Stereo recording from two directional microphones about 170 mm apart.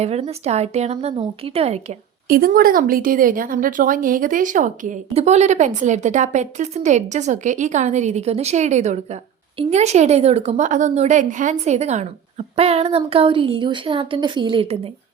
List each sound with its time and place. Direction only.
0.0 s a woman's voice: 40° right (ahead or behind)
2.2 s a woman's voice: 60° right (ahead or behind); by 14.8 s 30° right (ahead or behind)